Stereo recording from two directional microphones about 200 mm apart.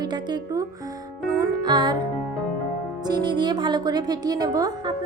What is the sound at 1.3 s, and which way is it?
Music, 20° right (ahead or behind).